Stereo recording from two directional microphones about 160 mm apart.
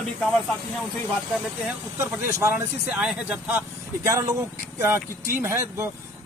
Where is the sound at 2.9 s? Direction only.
5° right (ahead or behind).